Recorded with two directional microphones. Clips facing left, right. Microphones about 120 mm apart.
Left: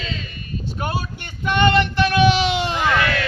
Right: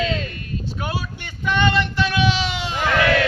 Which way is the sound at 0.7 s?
45° left (ahead or behind).